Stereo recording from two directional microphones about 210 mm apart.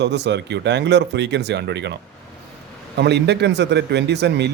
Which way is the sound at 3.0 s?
55° right (ahead or behind).